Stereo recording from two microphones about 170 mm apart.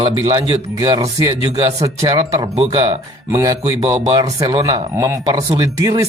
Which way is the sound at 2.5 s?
35° right (ahead or behind).